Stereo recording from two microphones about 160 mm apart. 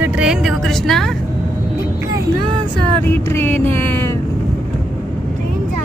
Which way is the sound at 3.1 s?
15° left (ahead or behind).